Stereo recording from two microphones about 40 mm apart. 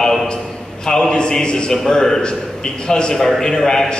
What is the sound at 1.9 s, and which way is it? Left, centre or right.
A man's voice, centre.